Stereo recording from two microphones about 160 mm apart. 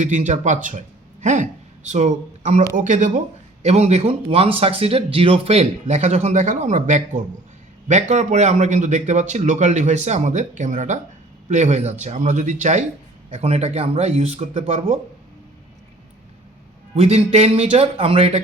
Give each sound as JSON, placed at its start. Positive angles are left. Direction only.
{"t": 0.0, "sound": "a man's voice", "side_deg": -50}
{"t": 16.9, "sound": "a man's voice", "side_deg": -40}